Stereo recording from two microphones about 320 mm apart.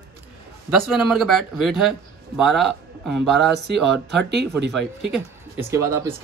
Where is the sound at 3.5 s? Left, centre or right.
Right.